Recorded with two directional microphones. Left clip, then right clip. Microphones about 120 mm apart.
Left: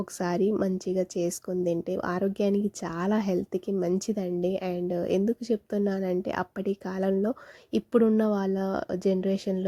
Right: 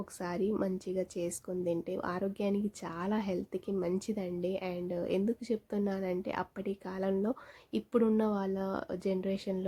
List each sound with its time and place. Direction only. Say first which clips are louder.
0.0 s speech: left 8 dB; 60° left (ahead or behind)
0.5 s speech: left 6 dB; 50° left (ahead or behind)